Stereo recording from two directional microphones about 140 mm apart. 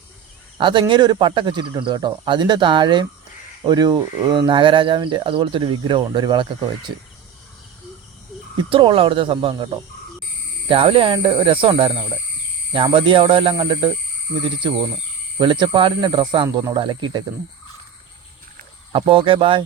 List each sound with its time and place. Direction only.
0.6 s speech: 35° right (ahead or behind)
8.7 s speech: 40° right (ahead or behind)
15.4 s speech: 35° right (ahead or behind)
18.9 s speech: 40° right (ahead or behind)